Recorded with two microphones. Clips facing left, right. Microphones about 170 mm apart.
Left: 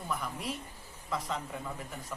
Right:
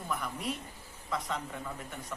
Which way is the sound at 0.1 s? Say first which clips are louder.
Right 1 dB; centre (ahead or behind).